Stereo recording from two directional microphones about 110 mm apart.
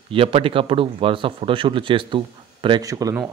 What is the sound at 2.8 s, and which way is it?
Speech, 35° right (ahead or behind).